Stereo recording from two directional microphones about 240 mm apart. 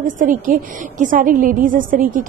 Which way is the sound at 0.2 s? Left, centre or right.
Right.